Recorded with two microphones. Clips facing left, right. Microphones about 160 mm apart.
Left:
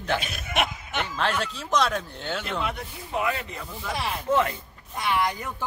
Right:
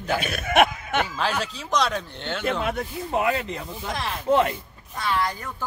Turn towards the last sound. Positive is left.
turn(degrees=15)  # may be behind; listen again after turning